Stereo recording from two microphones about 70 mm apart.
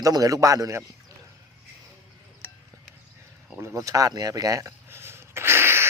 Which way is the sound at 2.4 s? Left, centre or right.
Left.